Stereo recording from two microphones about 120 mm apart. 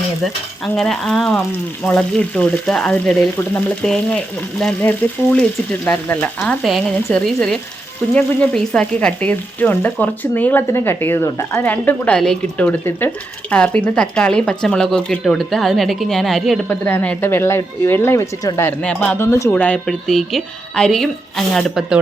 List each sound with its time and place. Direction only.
0.6 s speech: centre (ahead or behind)
6.6 s speech: centre (ahead or behind); by 18.7 s 25° left (ahead or behind)
18.8 s speech: 10° left (ahead or behind)
19.5 s speech: 10° left (ahead or behind); by 22.0 s 5° right (ahead or behind)